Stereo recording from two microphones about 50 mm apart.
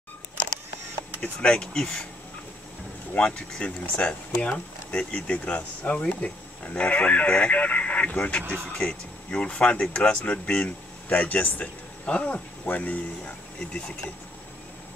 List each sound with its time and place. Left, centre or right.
1.2 s speech: centre
3.2 s speech: centre